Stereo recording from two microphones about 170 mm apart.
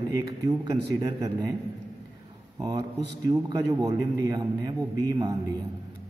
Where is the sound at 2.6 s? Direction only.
20° right (ahead or behind).